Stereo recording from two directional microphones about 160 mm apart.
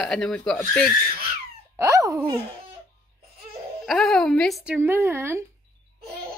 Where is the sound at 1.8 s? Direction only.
20° right (ahead or behind).